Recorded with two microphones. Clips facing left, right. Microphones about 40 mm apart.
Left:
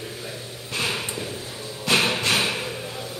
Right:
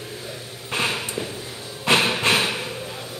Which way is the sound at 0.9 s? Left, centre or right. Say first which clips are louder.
Right 1 dB; centre.